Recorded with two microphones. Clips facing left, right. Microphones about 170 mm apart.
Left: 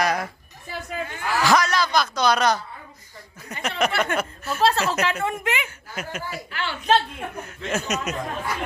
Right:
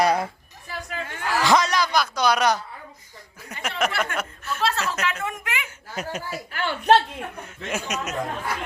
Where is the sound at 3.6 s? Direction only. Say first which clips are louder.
Left 2 dB; 5° right (ahead or behind).